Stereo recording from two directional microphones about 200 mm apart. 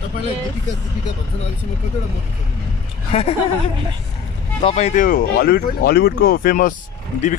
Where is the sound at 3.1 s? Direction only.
30° left (ahead or behind).